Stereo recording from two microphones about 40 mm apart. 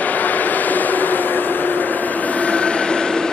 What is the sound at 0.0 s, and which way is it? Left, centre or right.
Vehicle, left.